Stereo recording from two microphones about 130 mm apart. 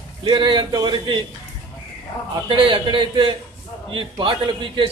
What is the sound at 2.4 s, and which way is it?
A man's voice, 40° right (ahead or behind).